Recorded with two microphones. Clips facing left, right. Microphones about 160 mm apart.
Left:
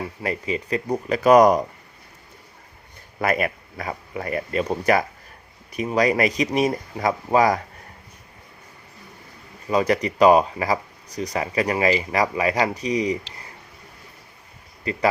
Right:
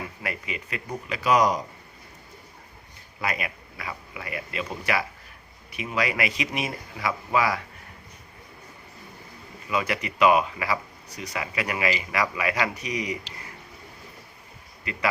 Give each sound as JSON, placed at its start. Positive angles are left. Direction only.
{"t": 0.2, "sound": "speech", "side_deg": 35}
{"t": 3.2, "sound": "speech", "side_deg": 50}
{"t": 9.6, "sound": "speech", "side_deg": 35}
{"t": 14.9, "sound": "speech", "side_deg": 35}